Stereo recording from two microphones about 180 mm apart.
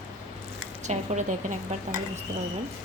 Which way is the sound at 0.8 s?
40° right (ahead or behind).